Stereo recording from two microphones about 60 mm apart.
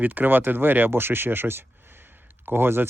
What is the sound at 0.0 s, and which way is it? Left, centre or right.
Speech, right.